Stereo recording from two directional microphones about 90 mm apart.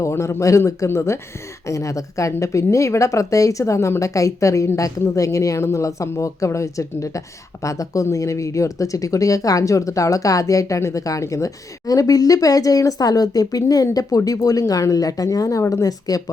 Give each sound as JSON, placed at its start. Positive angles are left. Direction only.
{"t": 0.0, "sound": "speech", "side_deg": 30}